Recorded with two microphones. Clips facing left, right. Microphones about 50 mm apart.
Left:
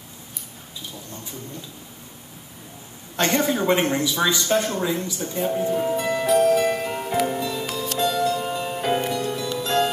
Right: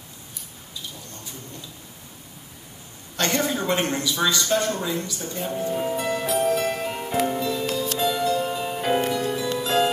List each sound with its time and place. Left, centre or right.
3.2 s speech: centre
5.8 s music: centre